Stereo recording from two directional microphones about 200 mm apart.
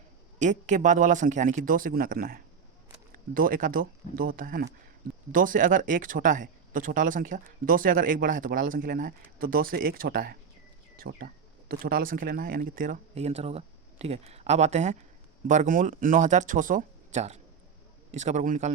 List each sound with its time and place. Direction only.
0.3 s speech: 35° right (ahead or behind)